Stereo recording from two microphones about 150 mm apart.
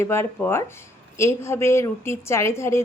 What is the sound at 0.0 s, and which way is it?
A woman's voice, 15° left (ahead or behind).